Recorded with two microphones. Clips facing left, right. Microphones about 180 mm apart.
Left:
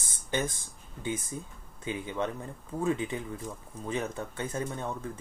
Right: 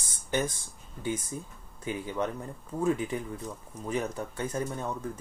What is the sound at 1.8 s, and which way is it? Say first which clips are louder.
Speech: right 1 dB; 20° left (ahead or behind).